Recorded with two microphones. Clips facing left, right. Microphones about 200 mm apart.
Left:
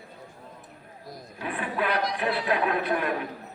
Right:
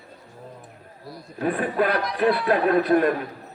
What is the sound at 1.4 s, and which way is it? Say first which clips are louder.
Speech: right 8 dB; 40° right (ahead or behind).